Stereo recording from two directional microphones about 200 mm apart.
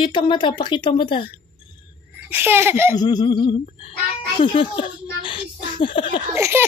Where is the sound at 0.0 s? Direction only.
25° left (ahead or behind).